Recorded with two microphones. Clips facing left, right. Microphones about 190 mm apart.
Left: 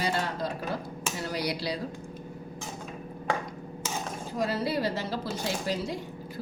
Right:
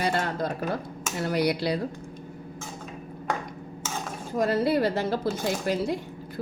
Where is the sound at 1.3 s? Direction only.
55° right (ahead or behind).